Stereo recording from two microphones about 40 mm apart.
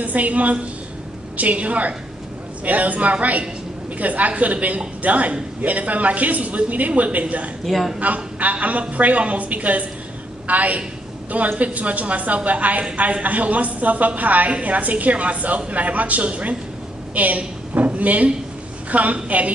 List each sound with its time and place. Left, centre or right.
0.0 s a woman's voice: right
7.6 s a woman's voice: centre
8.0 s a woman's voice: right